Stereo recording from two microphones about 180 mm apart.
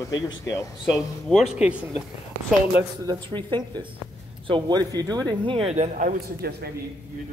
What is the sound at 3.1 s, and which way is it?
Speech, 25° right (ahead or behind).